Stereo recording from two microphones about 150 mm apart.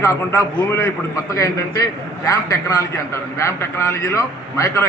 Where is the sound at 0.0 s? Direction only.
20° left (ahead or behind).